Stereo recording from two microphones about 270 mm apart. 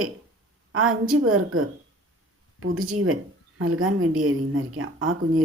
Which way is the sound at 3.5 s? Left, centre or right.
Right.